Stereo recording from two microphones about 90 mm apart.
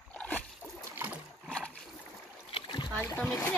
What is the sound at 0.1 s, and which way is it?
Boat, 15° left (ahead or behind).